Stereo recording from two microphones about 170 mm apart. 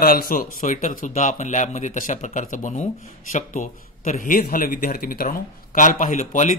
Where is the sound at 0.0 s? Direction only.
55° left (ahead or behind).